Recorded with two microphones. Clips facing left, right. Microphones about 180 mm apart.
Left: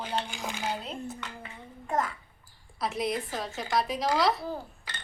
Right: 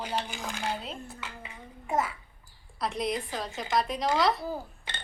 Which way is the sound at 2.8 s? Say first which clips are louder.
Even; centre (ahead or behind).